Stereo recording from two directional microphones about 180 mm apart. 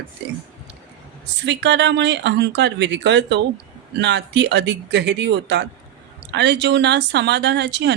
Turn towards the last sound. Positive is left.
turn(degrees=-75)  # may be behind; listen again after turning